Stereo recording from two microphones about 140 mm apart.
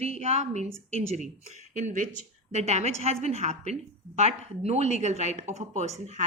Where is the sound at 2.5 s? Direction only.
55° right (ahead or behind).